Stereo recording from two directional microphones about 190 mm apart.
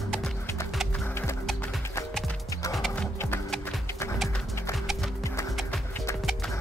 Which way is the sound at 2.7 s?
Centre (ahead or behind).